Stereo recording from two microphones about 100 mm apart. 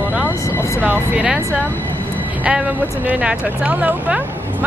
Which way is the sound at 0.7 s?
15° right (ahead or behind).